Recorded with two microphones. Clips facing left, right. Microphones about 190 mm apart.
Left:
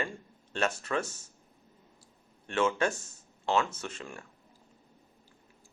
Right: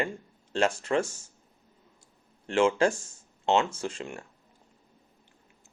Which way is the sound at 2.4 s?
30° right (ahead or behind).